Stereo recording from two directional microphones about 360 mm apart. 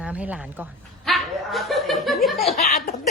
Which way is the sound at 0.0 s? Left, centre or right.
Centre.